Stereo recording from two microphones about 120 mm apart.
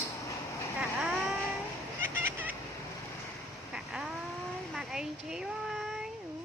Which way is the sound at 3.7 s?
5° right (ahead or behind).